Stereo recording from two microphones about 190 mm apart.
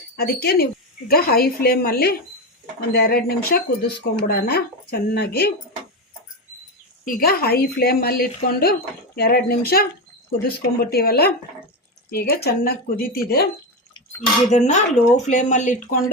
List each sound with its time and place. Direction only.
0.2 s a woman's voice: 55° left (ahead or behind)
7.0 s a woman's voice: 50° left (ahead or behind)
14.5 s speech: 35° left (ahead or behind)